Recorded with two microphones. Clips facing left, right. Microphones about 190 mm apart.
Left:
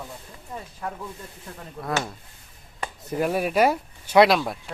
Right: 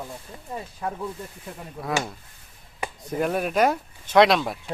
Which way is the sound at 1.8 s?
Centre (ahead or behind).